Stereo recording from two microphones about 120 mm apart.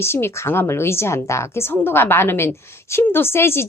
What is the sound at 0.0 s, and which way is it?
A woman's voice, 20° left (ahead or behind).